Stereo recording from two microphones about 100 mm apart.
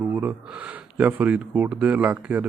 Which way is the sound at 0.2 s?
15° right (ahead or behind).